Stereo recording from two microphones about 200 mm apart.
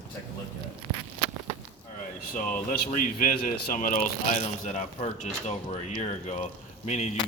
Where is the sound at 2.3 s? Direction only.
40° left (ahead or behind).